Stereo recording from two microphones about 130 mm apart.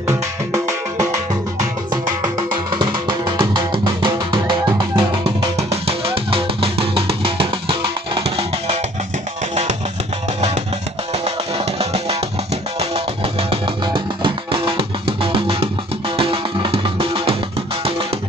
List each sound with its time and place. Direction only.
0.0 s music: 25° right (ahead or behind)
2.8 s music: 35° right (ahead or behind)
11.5 s music: 50° right (ahead or behind)